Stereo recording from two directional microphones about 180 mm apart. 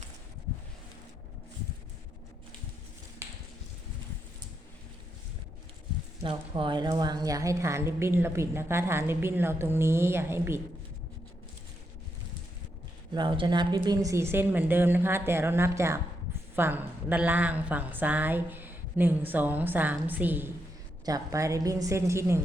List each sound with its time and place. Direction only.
6.2 s a woman's voice: 25° right (ahead or behind)
13.1 s a woman's voice: 25° right (ahead or behind)